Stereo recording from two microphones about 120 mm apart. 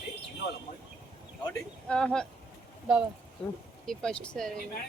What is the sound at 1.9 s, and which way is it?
Speech, 5° left (ahead or behind).